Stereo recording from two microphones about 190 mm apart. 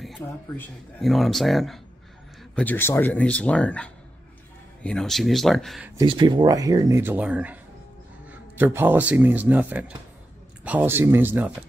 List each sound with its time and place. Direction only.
0.6 s speech: centre (ahead or behind)
5.9 s speech: 25° right (ahead or behind)